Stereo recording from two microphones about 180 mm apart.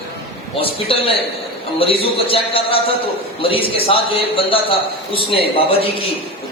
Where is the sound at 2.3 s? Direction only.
30° left (ahead or behind).